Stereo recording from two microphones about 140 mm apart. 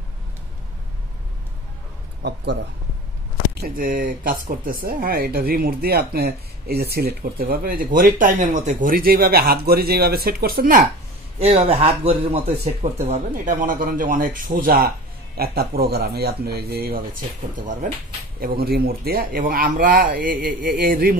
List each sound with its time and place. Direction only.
3.6 s speech: 85° right
11.3 s a man's voice: 45° right (ahead or behind)
13.0 s speech: 60° right (ahead or behind); by 17.0 s 90° right
18.4 s speech: 90° right